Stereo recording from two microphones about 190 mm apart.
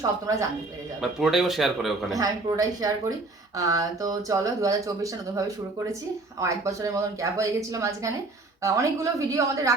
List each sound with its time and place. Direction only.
0.0 s speech: 15° right (ahead or behind)
1.0 s a man's voice: centre (ahead or behind)
2.1 s speech: 20° right (ahead or behind)
6.4 s speech: 15° right (ahead or behind)